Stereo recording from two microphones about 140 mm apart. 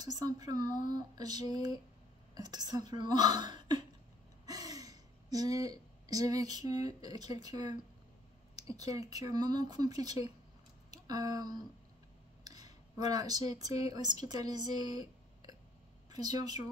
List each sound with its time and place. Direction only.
0.0 s speech: 30° right (ahead or behind)
0.7 s speech: 65° left (ahead or behind)
0.9 s speech: 30° right (ahead or behind)
4.5 s a sound: 25° right (ahead or behind)
7.0 s speech: 30° right (ahead or behind)
8.7 s speech: 25° right (ahead or behind)